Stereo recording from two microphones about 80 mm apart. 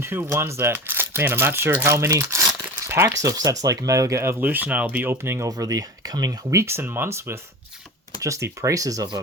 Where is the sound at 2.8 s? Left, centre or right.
Right.